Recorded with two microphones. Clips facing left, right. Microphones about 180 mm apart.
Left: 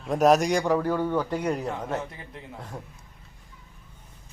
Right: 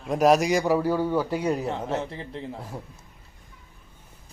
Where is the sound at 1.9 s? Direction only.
30° right (ahead or behind).